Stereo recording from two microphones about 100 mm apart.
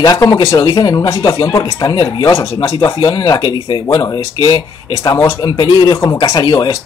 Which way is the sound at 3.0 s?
45° left (ahead or behind).